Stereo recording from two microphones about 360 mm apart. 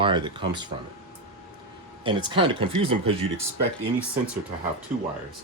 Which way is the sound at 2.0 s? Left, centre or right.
Centre.